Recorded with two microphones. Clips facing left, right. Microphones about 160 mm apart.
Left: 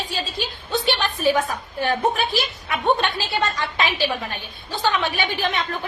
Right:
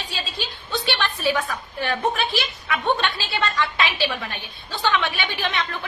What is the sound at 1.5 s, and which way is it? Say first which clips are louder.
A woman's voice: left 3 dB; 40° left (ahead or behind).